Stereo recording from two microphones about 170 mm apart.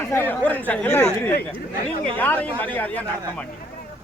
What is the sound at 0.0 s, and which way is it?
Speech, 15° left (ahead or behind).